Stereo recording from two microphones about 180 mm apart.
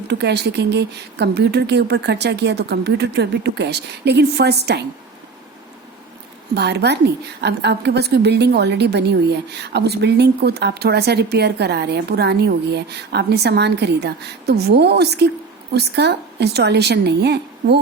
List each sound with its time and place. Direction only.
0.1 s a woman's voice: 70° right (ahead or behind)
6.5 s a woman's voice: 65° right (ahead or behind)